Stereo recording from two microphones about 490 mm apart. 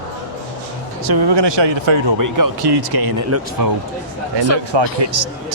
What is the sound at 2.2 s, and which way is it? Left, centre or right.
Speech, right.